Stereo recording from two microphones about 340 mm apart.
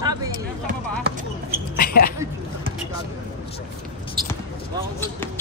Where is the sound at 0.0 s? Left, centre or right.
Centre.